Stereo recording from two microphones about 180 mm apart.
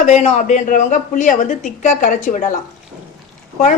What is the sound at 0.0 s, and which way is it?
A woman's voice, 40° left (ahead or behind).